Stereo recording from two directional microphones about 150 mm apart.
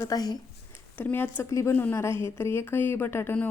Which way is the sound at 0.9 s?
15° left (ahead or behind).